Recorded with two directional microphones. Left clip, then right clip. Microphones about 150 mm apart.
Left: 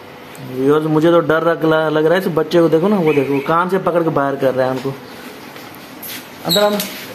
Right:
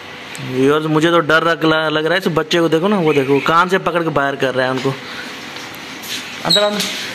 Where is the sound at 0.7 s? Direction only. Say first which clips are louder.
Left 2 dB; 15° right (ahead or behind).